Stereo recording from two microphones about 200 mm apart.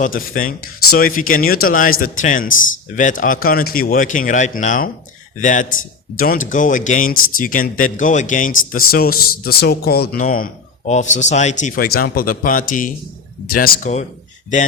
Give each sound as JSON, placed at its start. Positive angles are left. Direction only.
{"t": 0.0, "sound": "a man's voice", "side_deg": 45}